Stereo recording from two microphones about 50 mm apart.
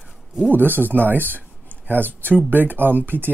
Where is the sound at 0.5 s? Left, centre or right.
Right.